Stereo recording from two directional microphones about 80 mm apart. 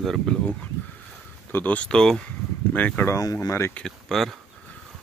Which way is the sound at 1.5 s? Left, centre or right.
Centre.